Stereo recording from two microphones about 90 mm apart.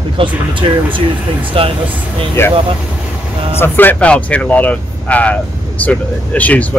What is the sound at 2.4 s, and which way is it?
Speech, 25° left (ahead or behind).